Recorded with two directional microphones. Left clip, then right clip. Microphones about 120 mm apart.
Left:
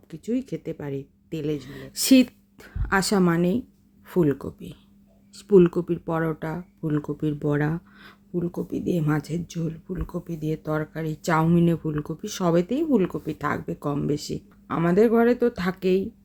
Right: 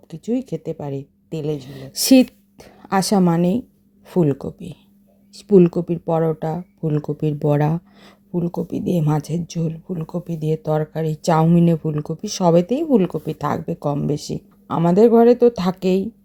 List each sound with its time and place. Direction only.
0.1 s speech: 25° right (ahead or behind)
10.2 s speech: 45° right (ahead or behind)
13.8 s speech: 30° right (ahead or behind)